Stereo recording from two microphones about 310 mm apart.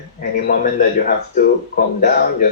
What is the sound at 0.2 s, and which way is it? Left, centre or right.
Speech, left.